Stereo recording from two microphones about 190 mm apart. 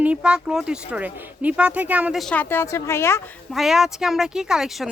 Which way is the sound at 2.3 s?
10° left (ahead or behind).